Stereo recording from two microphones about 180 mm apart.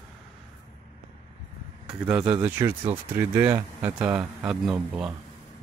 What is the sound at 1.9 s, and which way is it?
A man's voice, 5° right (ahead or behind).